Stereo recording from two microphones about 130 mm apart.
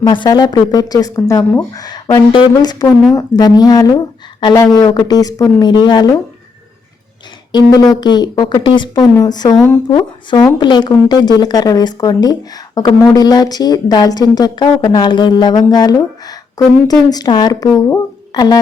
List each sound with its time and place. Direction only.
0.0 s speech: 35° left (ahead or behind)
7.5 s speech: 30° left (ahead or behind)